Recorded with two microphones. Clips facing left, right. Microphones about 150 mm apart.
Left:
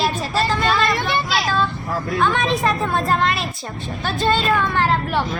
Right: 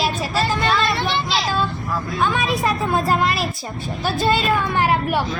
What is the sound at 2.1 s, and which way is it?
A woman's voice, 5° right (ahead or behind).